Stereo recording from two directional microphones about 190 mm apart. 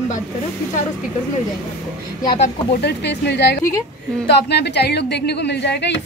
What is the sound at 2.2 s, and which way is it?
Speech, 35° left (ahead or behind).